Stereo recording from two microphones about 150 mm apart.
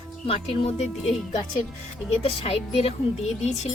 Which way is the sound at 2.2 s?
40° left (ahead or behind).